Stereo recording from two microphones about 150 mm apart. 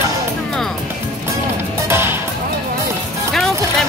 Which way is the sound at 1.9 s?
15° right (ahead or behind).